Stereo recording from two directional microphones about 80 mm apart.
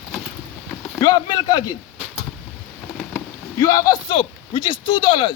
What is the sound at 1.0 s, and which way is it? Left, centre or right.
Speech, left.